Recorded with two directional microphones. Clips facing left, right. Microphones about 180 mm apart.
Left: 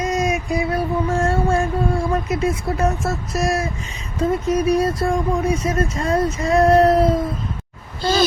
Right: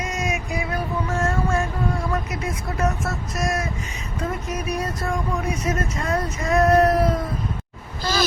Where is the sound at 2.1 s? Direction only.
25° left (ahead or behind).